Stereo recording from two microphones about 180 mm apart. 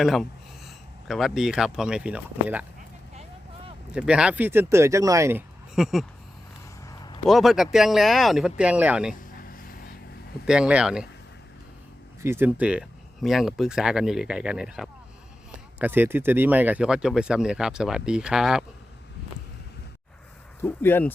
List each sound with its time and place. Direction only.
0.0 s speech: centre (ahead or behind)
3.9 s speech: 5° right (ahead or behind)
5.7 s speech: centre (ahead or behind)
6.8 s a sound: 20° left (ahead or behind)
7.3 s speech: centre (ahead or behind)
9.3 s vehicle: 55° left (ahead or behind)
10.4 s speech: 5° right (ahead or behind)
12.2 s speech: 10° right (ahead or behind)
20.6 s speech: 10° left (ahead or behind)